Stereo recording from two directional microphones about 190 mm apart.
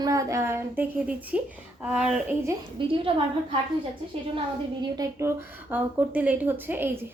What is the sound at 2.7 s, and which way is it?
Speech, 25° right (ahead or behind).